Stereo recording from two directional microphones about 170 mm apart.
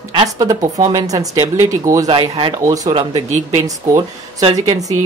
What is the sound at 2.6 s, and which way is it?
Speech, 20° right (ahead or behind).